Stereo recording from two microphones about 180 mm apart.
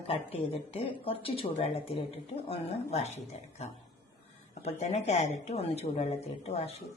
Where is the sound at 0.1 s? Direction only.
35° left (ahead or behind).